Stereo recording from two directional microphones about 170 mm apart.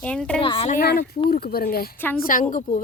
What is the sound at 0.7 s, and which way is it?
A woman's voice, 65° left (ahead or behind).